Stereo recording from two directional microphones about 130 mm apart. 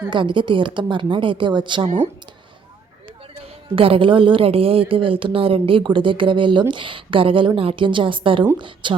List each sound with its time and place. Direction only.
0.1 s a woman's voice: 40° right (ahead or behind)
3.8 s a woman's voice: 45° right (ahead or behind)